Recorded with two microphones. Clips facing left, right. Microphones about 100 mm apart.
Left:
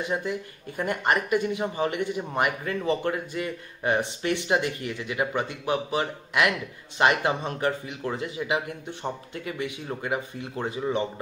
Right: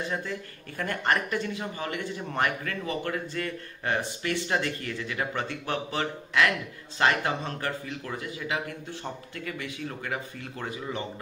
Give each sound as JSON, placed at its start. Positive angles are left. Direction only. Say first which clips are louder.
{"t": 0.0, "sound": "speech", "louder": "left 4 dB", "side_deg": 20}